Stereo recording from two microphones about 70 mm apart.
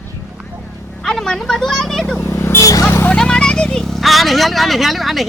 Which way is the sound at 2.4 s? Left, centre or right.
Left.